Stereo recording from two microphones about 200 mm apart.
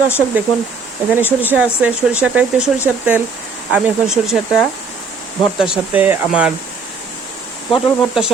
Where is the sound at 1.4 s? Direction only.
10° right (ahead or behind).